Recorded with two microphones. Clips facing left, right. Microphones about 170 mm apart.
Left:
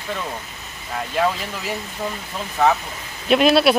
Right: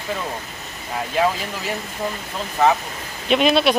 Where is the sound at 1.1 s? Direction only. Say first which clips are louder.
Right 1 dB; centre (ahead or behind).